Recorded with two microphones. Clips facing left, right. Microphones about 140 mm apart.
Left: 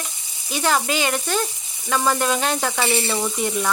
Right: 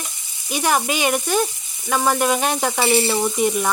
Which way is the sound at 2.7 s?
25° right (ahead or behind).